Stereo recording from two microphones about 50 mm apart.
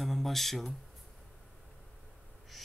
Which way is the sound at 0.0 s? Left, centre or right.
Centre.